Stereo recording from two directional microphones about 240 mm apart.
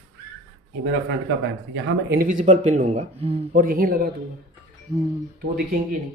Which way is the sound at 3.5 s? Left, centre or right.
Right.